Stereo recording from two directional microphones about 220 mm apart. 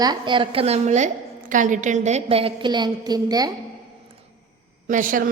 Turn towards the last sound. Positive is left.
turn(degrees=-40)  # may be behind; listen again after turning